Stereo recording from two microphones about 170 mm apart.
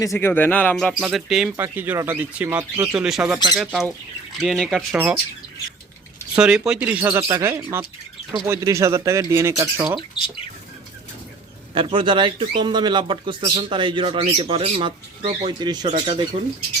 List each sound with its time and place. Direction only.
0.0 s speech: 15° left (ahead or behind)
0.9 s speech: 5° right (ahead or behind)
6.3 s speech: 5° right (ahead or behind)
7.1 s a man's voice: 20° right (ahead or behind)
11.7 s a man's voice: 25° right (ahead or behind)
16.3 s speech: 40° right (ahead or behind)